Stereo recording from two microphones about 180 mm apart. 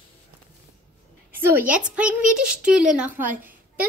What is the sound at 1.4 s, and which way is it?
Child singing, 10° right (ahead or behind).